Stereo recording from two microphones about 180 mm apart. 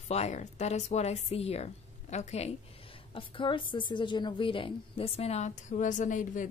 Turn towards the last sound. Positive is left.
turn(degrees=45)  # may be behind; listen again after turning